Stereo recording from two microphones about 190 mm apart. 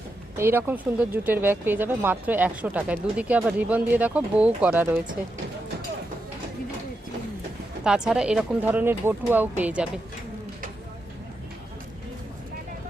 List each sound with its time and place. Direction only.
0.3 s speech: 10° right (ahead or behind)
7.9 s speech: 5° right (ahead or behind)